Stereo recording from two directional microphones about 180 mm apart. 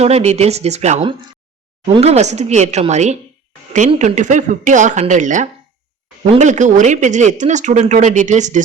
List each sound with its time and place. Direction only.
0.0 s speech: 35° right (ahead or behind)
6.2 s speech: 30° right (ahead or behind)
6.5 s speech: 45° right (ahead or behind)